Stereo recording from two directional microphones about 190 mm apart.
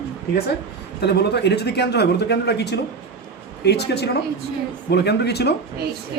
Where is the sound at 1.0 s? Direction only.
60° left (ahead or behind).